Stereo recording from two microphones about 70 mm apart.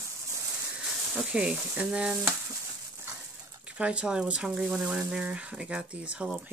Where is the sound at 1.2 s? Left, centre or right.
Centre.